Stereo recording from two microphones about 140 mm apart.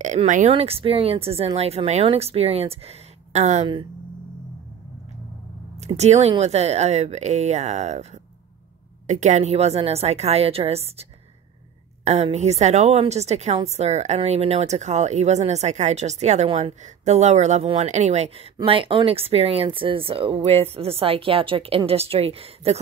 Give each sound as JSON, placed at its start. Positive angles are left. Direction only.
{"t": 0.5, "sound": "speech", "side_deg": -45}
{"t": 5.8, "sound": "speech", "side_deg": -50}
{"t": 18.6, "sound": "speech", "side_deg": -40}